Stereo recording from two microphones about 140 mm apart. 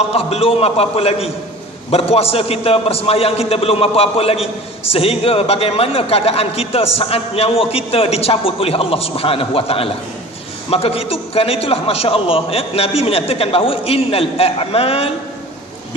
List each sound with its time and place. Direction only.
0.1 s a man's voice: 45° left (ahead or behind)